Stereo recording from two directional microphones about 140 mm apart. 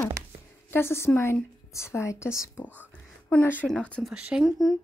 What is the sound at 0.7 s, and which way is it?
A woman's voice, 15° left (ahead or behind).